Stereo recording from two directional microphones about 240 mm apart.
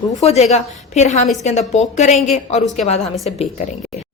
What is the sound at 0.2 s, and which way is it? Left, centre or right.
A woman's voice, left.